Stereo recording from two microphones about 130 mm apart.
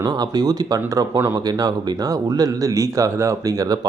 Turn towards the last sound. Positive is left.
turn(degrees=-30)  # may be behind; listen again after turning